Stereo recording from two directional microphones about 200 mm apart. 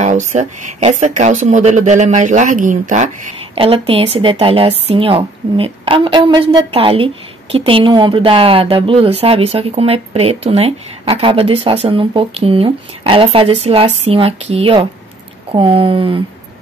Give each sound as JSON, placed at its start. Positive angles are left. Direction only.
{"t": 0.0, "sound": "speech", "side_deg": -40}